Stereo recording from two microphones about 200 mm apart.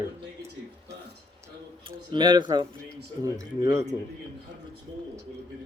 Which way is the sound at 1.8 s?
25° right (ahead or behind).